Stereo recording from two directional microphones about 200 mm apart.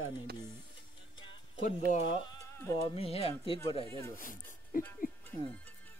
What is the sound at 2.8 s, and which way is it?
Speech, 30° left (ahead or behind).